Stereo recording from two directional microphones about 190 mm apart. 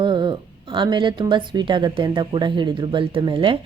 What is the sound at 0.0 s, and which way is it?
A woman's voice, 25° right (ahead or behind).